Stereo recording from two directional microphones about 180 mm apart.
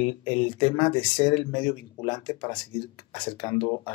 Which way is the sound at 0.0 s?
25° left (ahead or behind).